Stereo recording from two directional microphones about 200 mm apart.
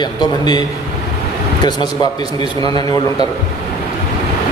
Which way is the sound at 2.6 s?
20° left (ahead or behind).